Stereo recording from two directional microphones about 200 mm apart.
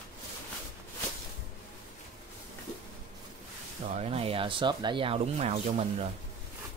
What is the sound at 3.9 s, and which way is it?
Speech, 30° right (ahead or behind).